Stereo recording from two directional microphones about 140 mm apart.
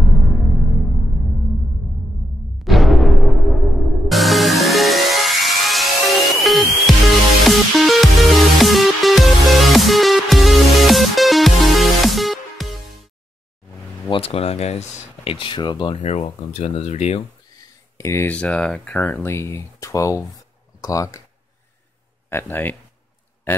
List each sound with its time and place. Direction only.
0.0 s music: centre (ahead or behind)
2.6 s music: centre (ahead or behind)
14.1 s speech: 45° left (ahead or behind)
15.3 s speech: 35° left (ahead or behind)
17.9 s speech: 20° left (ahead or behind)
22.3 s speech: 15° left (ahead or behind)